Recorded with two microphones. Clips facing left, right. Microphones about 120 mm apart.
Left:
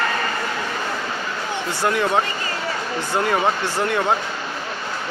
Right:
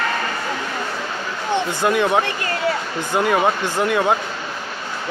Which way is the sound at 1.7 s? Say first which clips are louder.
Right 1 dB; 20° right (ahead or behind).